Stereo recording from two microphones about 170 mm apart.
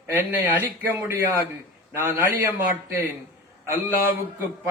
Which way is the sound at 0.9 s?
15° right (ahead or behind).